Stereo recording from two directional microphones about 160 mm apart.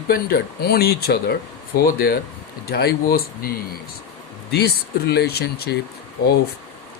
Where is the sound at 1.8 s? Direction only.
65° left (ahead or behind).